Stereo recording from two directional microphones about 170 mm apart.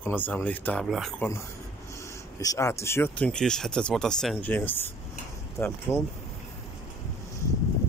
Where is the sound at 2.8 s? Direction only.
15° left (ahead or behind).